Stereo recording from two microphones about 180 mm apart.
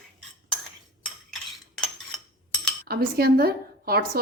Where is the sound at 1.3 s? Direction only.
Centre (ahead or behind).